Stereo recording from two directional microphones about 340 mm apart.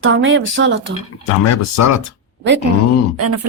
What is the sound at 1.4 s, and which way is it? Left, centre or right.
Speech, left.